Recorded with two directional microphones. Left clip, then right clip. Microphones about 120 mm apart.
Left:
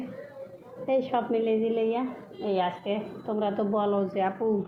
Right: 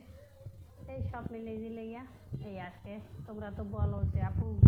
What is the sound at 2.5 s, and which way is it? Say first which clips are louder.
Speech: left 19 dB; 45° right (ahead or behind).